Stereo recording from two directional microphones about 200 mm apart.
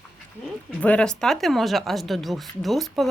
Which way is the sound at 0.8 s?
5° left (ahead or behind).